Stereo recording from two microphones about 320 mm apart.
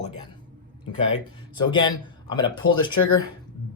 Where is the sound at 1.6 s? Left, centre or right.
Centre.